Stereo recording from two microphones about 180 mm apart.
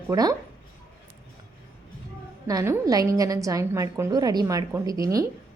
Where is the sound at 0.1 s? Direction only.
20° right (ahead or behind).